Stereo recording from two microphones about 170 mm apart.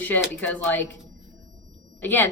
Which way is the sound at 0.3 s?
10° left (ahead or behind).